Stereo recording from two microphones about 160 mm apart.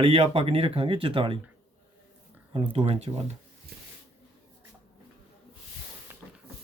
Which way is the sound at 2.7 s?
40° right (ahead or behind).